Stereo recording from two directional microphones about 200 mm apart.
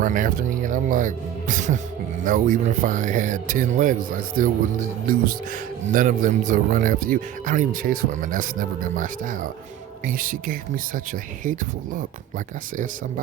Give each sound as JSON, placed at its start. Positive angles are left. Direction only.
{"t": 0.0, "sound": "a man's voice", "side_deg": -40}